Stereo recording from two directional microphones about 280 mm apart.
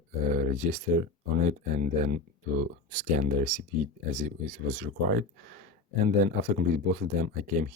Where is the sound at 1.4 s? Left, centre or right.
Right.